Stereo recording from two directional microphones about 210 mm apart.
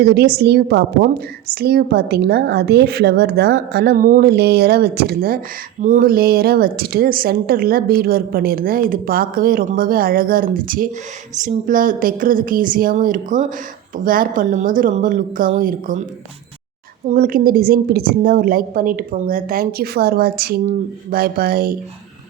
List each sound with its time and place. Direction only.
0.0 s a woman's voice: 50° right (ahead or behind)
17.1 s a woman's voice: 40° right (ahead or behind)